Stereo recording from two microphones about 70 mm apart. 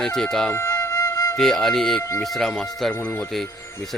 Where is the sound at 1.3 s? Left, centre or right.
Centre.